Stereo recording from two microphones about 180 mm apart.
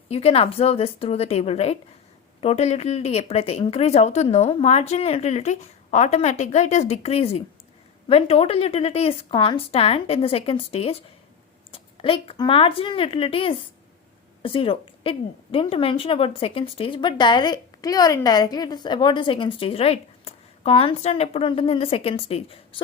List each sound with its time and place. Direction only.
0.1 s a woman's voice: 35° left (ahead or behind)